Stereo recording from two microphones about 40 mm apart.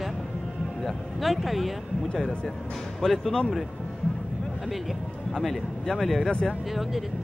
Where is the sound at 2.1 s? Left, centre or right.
Centre.